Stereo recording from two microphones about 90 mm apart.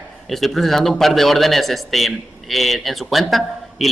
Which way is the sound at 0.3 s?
Centre (ahead or behind).